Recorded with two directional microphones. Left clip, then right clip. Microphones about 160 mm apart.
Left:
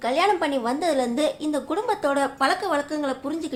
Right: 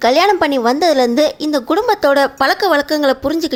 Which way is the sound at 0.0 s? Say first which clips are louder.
Right 10 dB; 50° right (ahead or behind).